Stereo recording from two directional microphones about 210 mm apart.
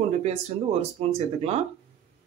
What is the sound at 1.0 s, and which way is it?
Speech, 30° right (ahead or behind).